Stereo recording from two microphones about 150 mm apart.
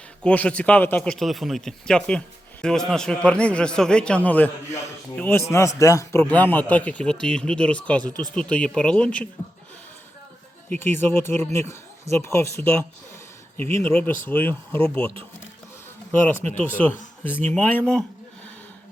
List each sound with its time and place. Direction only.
0.2 s speech: 5° left (ahead or behind)
10.7 s speech: 15° left (ahead or behind)
16.2 s speech: 10° left (ahead or behind)